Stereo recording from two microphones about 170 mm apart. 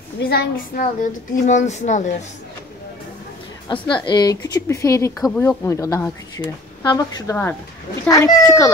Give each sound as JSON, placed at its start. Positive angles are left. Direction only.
{"t": 0.2, "sound": "a woman's voice", "side_deg": 65}
{"t": 3.6, "sound": "a woman's voice", "side_deg": 30}
{"t": 5.3, "sound": "speech", "side_deg": 5}
{"t": 5.7, "sound": "a woman's voice", "side_deg": 20}